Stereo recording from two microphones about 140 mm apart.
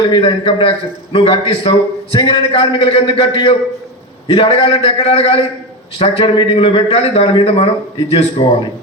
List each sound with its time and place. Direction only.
0.0 s a man's voice: 35° left (ahead or behind)